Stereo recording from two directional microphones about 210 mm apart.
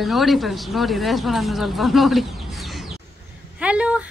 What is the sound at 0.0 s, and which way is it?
A woman's voice, centre (ahead or behind).